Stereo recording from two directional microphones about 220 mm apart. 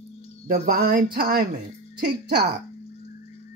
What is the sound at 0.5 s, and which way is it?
Speech, 45° right (ahead or behind).